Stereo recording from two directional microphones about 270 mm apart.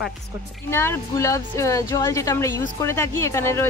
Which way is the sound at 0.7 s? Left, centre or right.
Centre.